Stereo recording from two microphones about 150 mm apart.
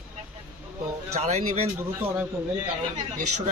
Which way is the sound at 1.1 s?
45° right (ahead or behind).